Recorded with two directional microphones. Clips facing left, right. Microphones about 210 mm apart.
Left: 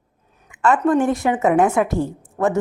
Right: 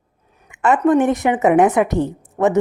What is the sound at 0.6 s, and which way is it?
A woman's voice, 20° right (ahead or behind).